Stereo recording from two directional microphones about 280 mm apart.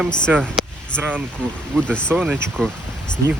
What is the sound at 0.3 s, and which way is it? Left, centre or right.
Speech, centre.